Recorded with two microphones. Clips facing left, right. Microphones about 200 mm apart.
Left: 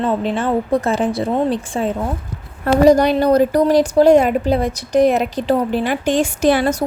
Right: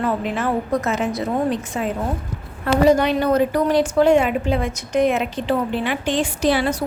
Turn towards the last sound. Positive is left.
turn(degrees=50)  # may be behind; listen again after turning